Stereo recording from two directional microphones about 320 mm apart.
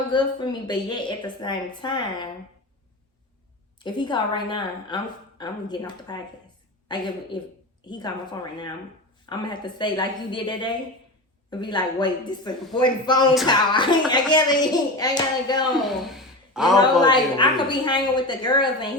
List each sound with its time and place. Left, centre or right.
0.1 s speech: centre
3.8 s speech: centre
16.0 s gasp: centre
17.0 s speech: centre